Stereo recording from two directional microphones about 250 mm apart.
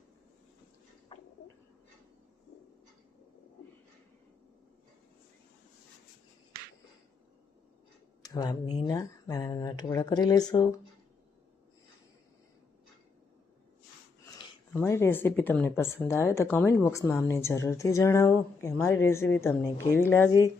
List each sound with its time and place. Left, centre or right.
8.2 s speech: centre
14.7 s speech: centre